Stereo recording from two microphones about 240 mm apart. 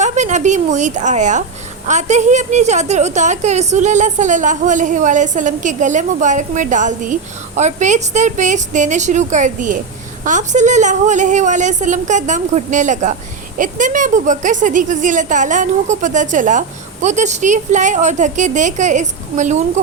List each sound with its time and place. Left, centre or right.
0.0 s a woman's voice: right